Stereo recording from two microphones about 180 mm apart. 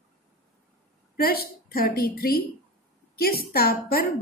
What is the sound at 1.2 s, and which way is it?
A woman's voice, 55° left (ahead or behind).